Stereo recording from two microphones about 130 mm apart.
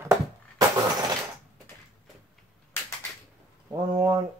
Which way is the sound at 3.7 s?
30° right (ahead or behind).